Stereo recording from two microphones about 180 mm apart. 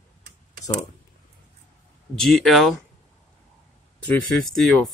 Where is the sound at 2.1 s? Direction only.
Centre (ahead or behind).